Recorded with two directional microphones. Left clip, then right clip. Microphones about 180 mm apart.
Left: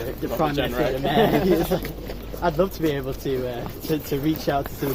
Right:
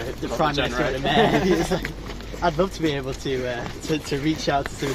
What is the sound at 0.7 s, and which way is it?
Speech, centre (ahead or behind).